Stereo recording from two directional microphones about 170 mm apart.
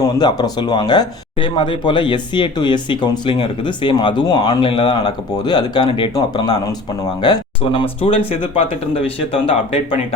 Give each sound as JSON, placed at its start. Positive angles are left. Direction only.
{"t": 0.0, "sound": "speech", "side_deg": 25}